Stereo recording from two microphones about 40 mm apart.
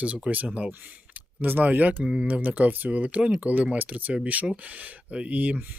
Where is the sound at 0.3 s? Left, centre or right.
Right.